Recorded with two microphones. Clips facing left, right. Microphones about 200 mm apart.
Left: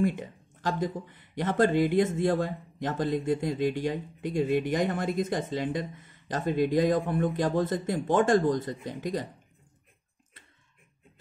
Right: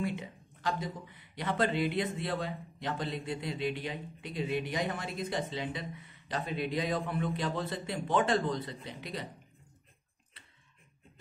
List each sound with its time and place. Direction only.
0.0 s speech: 50° left (ahead or behind)